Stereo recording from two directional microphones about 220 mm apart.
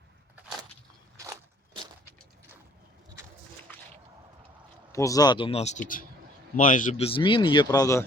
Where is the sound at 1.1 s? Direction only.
15° right (ahead or behind).